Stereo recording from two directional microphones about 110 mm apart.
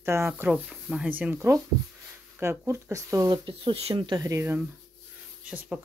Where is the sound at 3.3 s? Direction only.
50° right (ahead or behind).